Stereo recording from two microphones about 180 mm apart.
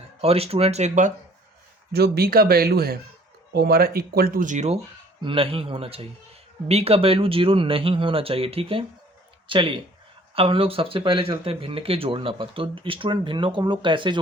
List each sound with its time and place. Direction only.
0.2 s speech: 35° right (ahead or behind)
1.9 s speech: 60° right (ahead or behind); by 14.2 s 25° right (ahead or behind)